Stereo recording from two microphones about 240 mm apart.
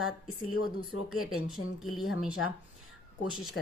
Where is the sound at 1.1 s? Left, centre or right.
Centre.